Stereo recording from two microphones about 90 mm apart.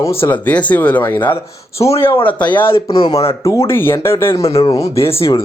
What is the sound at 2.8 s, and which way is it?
Speech, 60° left (ahead or behind).